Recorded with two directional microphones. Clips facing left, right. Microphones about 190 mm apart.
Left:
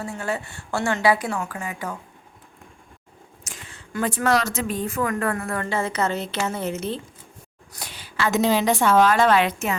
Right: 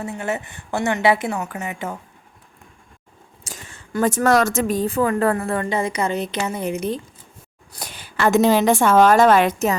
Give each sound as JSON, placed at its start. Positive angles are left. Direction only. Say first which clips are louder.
{"t": 0.0, "sound": "a woman's voice", "louder": "right 2 dB", "side_deg": -20}
{"t": 3.4, "sound": "a woman's voice", "louder": "right 4 dB", "side_deg": -45}
{"t": 5.6, "sound": "a woman's voice", "louder": "right 2 dB", "side_deg": -15}
{"t": 7.7, "sound": "a woman's voice", "louder": "right 3 dB", "side_deg": -45}